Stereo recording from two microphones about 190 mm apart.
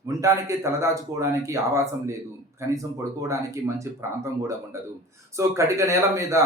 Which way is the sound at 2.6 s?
15° right (ahead or behind).